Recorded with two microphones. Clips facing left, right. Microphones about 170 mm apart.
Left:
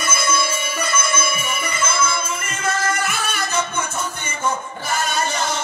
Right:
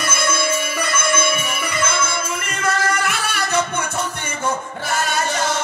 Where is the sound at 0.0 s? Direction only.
60° right (ahead or behind).